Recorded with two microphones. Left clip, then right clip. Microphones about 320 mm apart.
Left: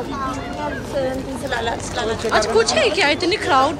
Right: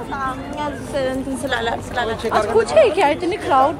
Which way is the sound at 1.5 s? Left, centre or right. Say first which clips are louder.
Right 1 dB; right.